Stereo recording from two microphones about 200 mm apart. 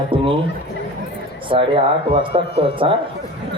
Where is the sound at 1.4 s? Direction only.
25° right (ahead or behind).